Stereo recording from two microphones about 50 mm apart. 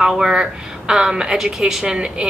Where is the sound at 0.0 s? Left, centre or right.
Centre.